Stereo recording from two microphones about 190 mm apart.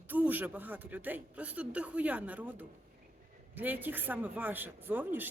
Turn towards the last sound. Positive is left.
turn(degrees=-10)  # may be behind; listen again after turning